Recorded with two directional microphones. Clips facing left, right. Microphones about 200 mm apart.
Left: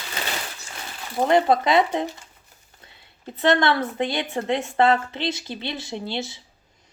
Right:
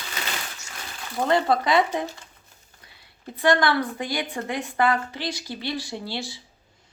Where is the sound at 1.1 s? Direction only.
20° left (ahead or behind).